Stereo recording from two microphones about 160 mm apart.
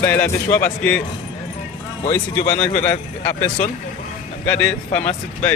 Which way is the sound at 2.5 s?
10° left (ahead or behind).